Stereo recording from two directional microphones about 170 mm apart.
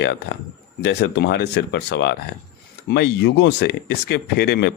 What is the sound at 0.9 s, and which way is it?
Speech, 85° left.